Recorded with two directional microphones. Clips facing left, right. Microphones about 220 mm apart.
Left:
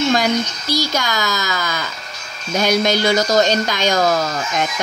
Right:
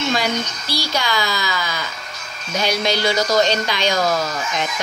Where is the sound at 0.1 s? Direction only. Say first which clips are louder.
Left 4 dB; 45° left (ahead or behind).